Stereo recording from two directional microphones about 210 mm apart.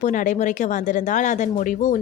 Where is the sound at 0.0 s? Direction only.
40° left (ahead or behind).